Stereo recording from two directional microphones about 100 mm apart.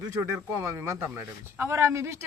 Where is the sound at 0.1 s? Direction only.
30° right (ahead or behind).